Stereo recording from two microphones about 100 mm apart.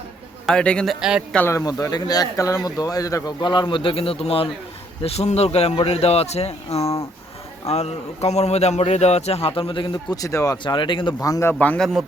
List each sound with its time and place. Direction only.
0.4 s a man's voice: 10° left (ahead or behind)
1.5 s speech: 30° left (ahead or behind)
3.4 s a man's voice: 50° left (ahead or behind); by 4.4 s 70° left (ahead or behind)
5.0 s speech: 90° left; by 10.2 s 55° left (ahead or behind)
10.2 s speech: 35° left (ahead or behind)
10.6 s a man's voice: 55° left (ahead or behind)
11.2 s speech: 35° left (ahead or behind)
11.8 s speech: 5° left (ahead or behind)